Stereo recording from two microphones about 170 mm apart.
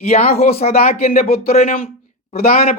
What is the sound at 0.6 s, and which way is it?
Speech, 40° left (ahead or behind).